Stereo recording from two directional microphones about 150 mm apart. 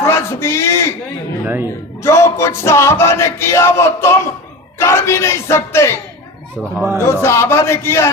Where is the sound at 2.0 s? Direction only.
20° left (ahead or behind).